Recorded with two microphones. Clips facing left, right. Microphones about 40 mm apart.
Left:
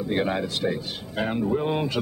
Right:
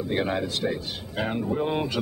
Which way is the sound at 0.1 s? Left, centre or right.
Centre.